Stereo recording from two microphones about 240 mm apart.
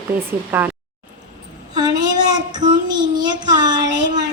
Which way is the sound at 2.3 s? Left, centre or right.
Centre.